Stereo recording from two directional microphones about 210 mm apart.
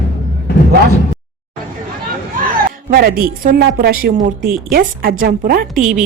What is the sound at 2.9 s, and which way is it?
Speech, 45° right (ahead or behind).